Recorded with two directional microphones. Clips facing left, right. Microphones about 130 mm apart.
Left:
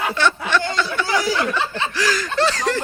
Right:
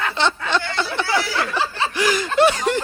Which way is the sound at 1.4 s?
30° right (ahead or behind).